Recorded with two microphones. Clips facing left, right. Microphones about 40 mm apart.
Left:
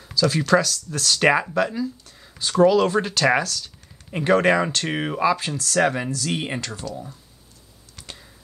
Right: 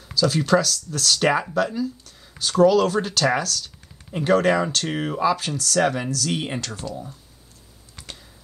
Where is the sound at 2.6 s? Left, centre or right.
Left.